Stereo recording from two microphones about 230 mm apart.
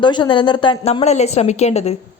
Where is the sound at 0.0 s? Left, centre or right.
Centre.